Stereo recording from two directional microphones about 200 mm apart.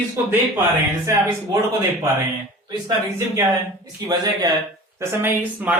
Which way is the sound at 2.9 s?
15° right (ahead or behind).